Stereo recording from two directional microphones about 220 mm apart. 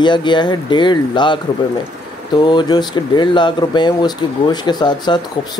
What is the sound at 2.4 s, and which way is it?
Speech, 20° left (ahead or behind).